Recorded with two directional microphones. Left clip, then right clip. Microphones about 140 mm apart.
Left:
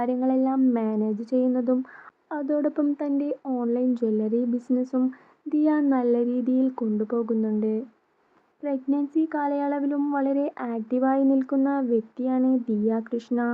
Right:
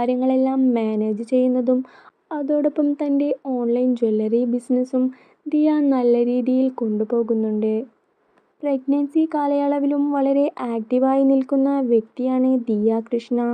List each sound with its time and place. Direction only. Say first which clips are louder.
0.0 s speech: right 5 dB; 15° right (ahead or behind)
3.4 s speech: right 5 dB; centre (ahead or behind)